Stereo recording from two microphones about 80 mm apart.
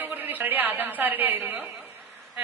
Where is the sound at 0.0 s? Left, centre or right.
Right.